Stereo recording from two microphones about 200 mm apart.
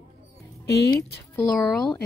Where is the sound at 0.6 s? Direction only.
60° left (ahead or behind).